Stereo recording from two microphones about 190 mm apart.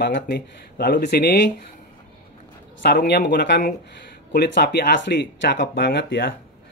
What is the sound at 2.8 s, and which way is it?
Speech, 55° left (ahead or behind).